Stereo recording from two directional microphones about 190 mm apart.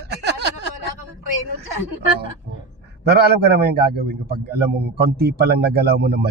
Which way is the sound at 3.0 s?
55° right (ahead or behind).